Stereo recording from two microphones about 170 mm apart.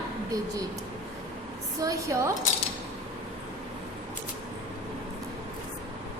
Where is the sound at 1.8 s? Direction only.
20° right (ahead or behind).